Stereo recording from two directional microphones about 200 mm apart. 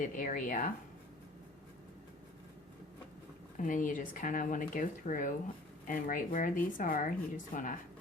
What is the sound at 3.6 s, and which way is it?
Speech, 40° left (ahead or behind).